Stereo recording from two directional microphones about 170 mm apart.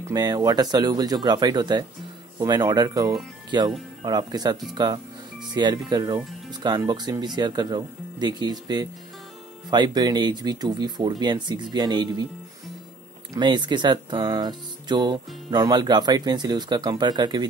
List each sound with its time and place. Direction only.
0.0 s speech: 25° right (ahead or behind)
13.3 s speech: 25° right (ahead or behind)